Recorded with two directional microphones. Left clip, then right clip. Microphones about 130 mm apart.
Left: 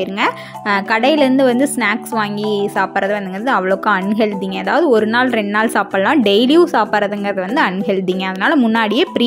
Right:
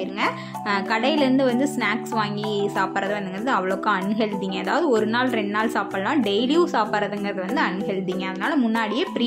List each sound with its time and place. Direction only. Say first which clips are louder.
0.2 s a woman's voice: left 6 dB; 55° left (ahead or behind)
8.4 s speech: left 9 dB; 55° left (ahead or behind)